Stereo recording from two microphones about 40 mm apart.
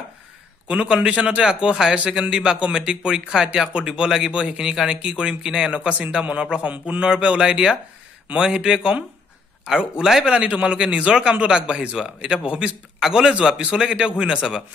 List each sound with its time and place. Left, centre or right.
0.7 s a man's voice: right